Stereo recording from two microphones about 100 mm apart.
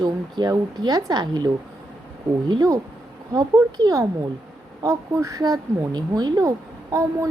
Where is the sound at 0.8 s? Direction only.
40° right (ahead or behind).